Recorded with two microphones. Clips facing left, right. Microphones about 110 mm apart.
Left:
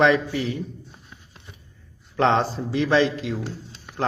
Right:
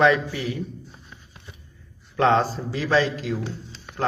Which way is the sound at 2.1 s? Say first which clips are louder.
Right 1 dB; 25° left (ahead or behind).